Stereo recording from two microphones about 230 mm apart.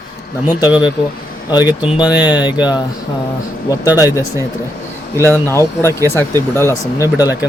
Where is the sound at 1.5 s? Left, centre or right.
Centre.